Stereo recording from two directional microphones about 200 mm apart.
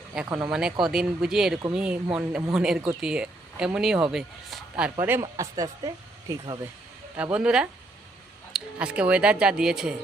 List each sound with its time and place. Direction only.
0.1 s speech: 5° right (ahead or behind)
7.2 s speech: 5° right (ahead or behind)